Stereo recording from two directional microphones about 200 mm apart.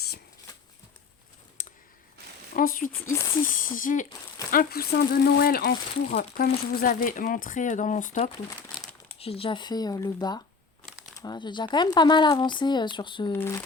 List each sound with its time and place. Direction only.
1.6 s a sound: 40° left (ahead or behind)
2.6 s speech: 45° left (ahead or behind); by 10.4 s 20° left (ahead or behind)
10.8 s shuffling cards: centre (ahead or behind)
11.1 s speech: 20° left (ahead or behind)